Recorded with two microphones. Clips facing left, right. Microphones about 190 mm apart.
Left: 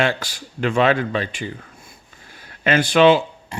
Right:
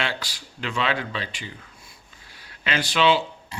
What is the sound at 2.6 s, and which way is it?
Speech, 50° left (ahead or behind).